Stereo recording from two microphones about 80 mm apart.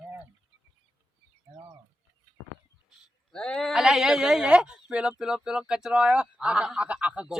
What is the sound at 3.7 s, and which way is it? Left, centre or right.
Speech, centre.